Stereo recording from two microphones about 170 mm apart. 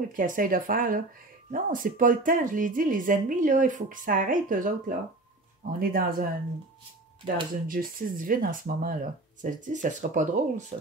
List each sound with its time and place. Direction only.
0.1 s a woman's voice: 55° right (ahead or behind)
7.2 s speech: 30° right (ahead or behind)
7.6 s a woman's voice: 55° right (ahead or behind); by 10.9 s 40° right (ahead or behind)